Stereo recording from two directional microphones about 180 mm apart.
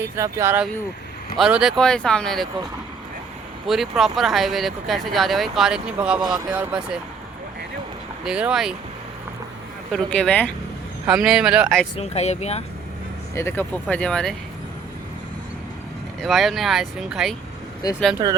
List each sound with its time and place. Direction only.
0.0 s speech: 15° right (ahead or behind); by 2.5 s centre (ahead or behind)
3.7 s speech: centre (ahead or behind)
8.2 s speech: 5° right (ahead or behind)
9.9 s speech: 5° left (ahead or behind)
11.0 s speech: 5° right (ahead or behind)
11.9 s speech: 35° left (ahead or behind)
13.3 s speech: 15° left (ahead or behind)
16.2 s speech: centre (ahead or behind)
17.8 s speech: 20° left (ahead or behind)